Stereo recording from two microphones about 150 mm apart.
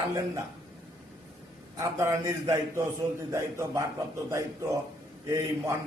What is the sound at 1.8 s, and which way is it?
A man's voice, 20° right (ahead or behind).